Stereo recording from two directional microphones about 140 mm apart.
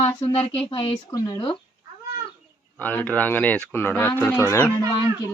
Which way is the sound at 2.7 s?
15° left (ahead or behind).